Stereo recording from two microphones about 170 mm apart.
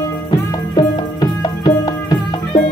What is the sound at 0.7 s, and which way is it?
Music, 25° left (ahead or behind).